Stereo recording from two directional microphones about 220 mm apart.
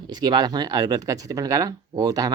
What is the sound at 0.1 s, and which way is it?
Speech, 20° right (ahead or behind).